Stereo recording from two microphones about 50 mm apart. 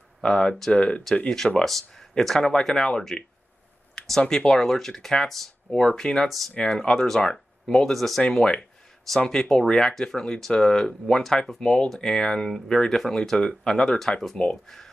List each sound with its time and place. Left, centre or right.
0.2 s speech: centre
1.6 s speech: centre
6.2 s speech: centre
6.7 s speech: centre